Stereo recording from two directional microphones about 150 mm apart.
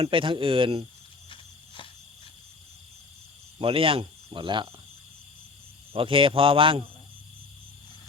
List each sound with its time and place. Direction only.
0.0 s a man's voice: 35° right (ahead or behind)
1.3 s a sound: 35° left (ahead or behind)
3.6 s speech: 35° right (ahead or behind)
5.9 s a man's voice: 35° right (ahead or behind)